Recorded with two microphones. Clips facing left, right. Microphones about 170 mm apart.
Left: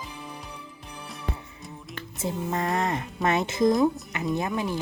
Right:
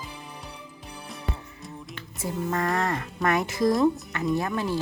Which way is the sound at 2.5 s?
20° left (ahead or behind).